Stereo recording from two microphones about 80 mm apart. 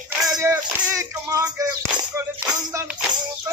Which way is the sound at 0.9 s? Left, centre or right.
Right.